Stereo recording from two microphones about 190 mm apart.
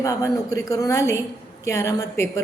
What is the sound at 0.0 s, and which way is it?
A woman's voice, 15° left (ahead or behind).